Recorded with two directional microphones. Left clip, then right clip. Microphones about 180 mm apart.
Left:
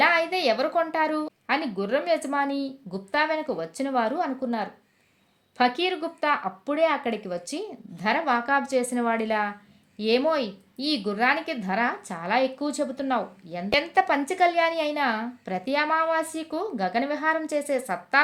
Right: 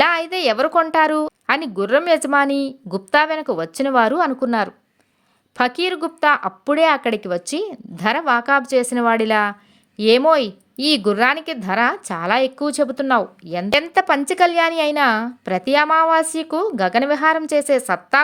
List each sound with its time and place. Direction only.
0.0 s a woman's voice: 40° right (ahead or behind)